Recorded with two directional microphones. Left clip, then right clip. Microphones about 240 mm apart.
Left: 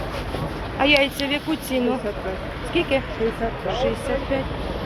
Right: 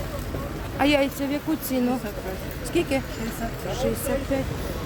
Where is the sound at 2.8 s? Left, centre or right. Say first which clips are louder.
Left 4 dB; right.